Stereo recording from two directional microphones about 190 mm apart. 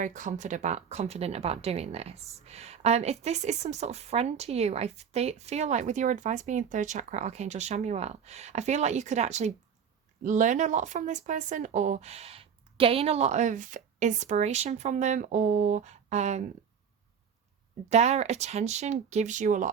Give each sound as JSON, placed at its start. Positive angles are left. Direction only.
{"t": 0.0, "sound": "a woman's voice", "side_deg": -40}
{"t": 17.8, "sound": "a woman's voice", "side_deg": -35}